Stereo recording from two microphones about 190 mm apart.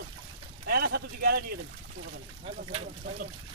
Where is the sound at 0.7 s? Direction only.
60° right (ahead or behind).